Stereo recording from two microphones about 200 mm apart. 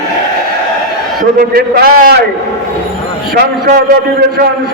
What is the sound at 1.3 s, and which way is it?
Speech, 45° right (ahead or behind).